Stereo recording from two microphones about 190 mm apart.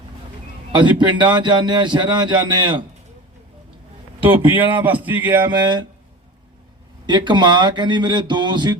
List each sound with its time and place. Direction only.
0.7 s a man's voice: 25° right (ahead or behind)
4.2 s a man's voice: 10° right (ahead or behind)
5.5 s a man's voice: 25° right (ahead or behind)
7.1 s a man's voice: 25° right (ahead or behind)